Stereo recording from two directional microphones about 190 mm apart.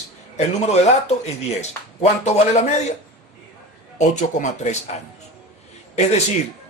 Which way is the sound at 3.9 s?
40° left (ahead or behind).